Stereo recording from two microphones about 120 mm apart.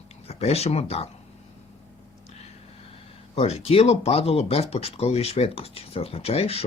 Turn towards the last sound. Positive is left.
turn(degrees=60)  # may be behind; listen again after turning